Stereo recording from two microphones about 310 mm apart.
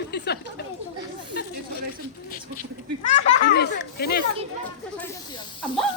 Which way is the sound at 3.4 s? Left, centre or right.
Left.